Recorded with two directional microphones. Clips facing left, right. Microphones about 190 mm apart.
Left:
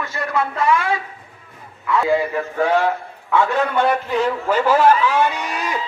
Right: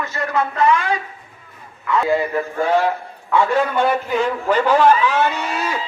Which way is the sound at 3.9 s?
Centre (ahead or behind).